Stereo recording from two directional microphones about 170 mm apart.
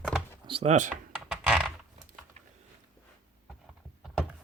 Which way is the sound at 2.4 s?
40° right (ahead or behind).